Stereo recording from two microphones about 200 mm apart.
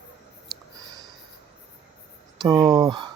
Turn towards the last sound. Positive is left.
turn(degrees=-20)  # may be behind; listen again after turning